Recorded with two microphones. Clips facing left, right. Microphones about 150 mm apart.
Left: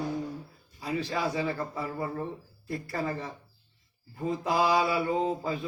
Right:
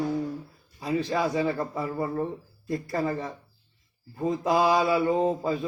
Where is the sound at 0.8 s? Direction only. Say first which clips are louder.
Right 4 dB; 25° right (ahead or behind).